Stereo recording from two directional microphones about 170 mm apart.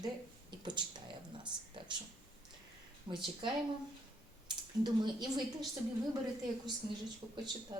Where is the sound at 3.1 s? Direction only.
25° right (ahead or behind).